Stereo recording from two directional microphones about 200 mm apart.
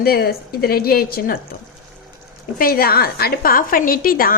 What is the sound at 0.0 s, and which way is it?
A woman's voice, 50° left (ahead or behind).